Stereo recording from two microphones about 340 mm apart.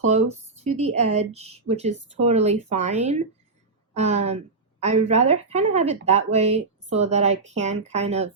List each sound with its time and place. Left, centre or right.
0.0 s speech: centre